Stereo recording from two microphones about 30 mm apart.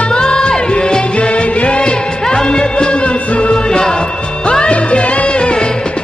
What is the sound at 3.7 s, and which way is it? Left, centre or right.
Music, left.